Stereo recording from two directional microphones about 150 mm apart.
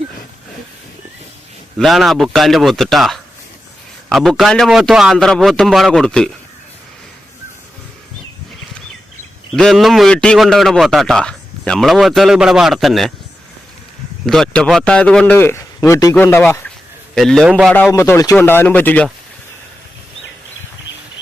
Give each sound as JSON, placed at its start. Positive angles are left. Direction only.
{"t": 1.8, "sound": "a man's voice", "side_deg": 0}
{"t": 9.6, "sound": "a man's voice", "side_deg": 0}
{"t": 14.3, "sound": "a man's voice", "side_deg": 5}
{"t": 17.2, "sound": "a man's voice", "side_deg": 0}
{"t": 17.9, "sound": "a man's voice", "side_deg": 20}